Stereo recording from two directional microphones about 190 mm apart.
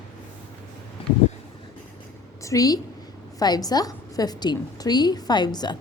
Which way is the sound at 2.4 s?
15° left (ahead or behind).